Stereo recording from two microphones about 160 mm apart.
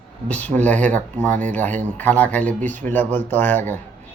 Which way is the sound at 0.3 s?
10° left (ahead or behind).